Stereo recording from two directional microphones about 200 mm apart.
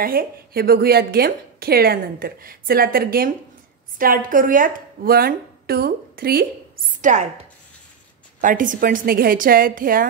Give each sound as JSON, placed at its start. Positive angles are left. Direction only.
{"t": 0.0, "sound": "a woman's voice", "side_deg": -45}
{"t": 8.4, "sound": "a woman's voice", "side_deg": -40}